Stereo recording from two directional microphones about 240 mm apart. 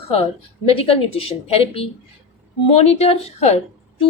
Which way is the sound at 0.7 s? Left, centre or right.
Left.